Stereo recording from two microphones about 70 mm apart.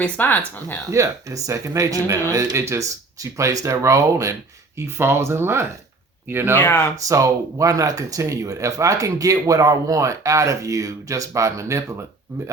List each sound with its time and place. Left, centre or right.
0.0 s speech: left
0.9 s speech: right
4.8 s speech: right
6.6 s speech: left
6.9 s speech: right